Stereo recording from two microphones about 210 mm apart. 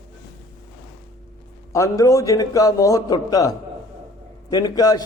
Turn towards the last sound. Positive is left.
turn(degrees=15)  # may be behind; listen again after turning